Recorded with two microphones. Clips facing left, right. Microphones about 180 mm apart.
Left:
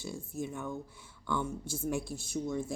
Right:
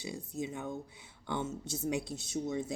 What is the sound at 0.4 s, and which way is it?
Speech, 65° right (ahead or behind).